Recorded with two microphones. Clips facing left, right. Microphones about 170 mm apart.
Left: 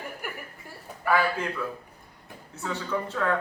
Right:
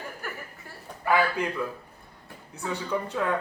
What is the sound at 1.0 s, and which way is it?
Speech, 15° right (ahead or behind).